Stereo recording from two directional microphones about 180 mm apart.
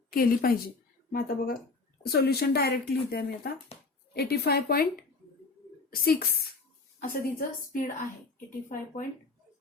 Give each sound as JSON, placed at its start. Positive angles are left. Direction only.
{"t": 0.1, "sound": "a woman's voice", "side_deg": 55}
{"t": 5.9, "sound": "a woman's voice", "side_deg": 60}